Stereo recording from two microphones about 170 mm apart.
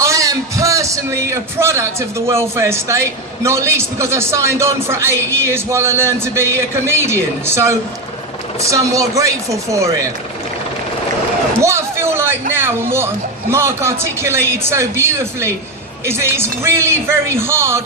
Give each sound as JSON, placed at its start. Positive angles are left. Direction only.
{"t": 0.0, "sound": "a man's voice", "side_deg": -20}
{"t": 11.6, "sound": "a sound", "side_deg": -15}
{"t": 13.5, "sound": "a man's voice", "side_deg": -15}